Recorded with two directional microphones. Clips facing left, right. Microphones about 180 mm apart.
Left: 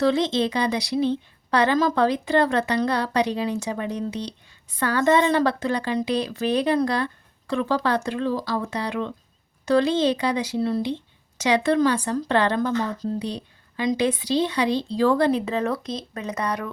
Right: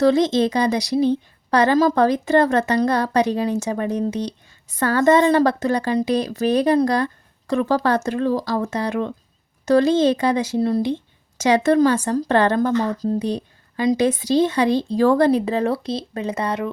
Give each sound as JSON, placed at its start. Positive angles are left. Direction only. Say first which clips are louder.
{"t": 0.0, "sound": "a woman's voice", "louder": "right 5 dB", "side_deg": -40}